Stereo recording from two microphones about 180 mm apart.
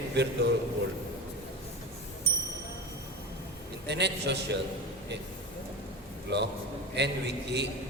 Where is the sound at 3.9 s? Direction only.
70° right (ahead or behind).